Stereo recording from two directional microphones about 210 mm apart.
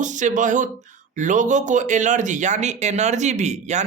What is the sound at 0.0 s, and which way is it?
Speech, 35° right (ahead or behind).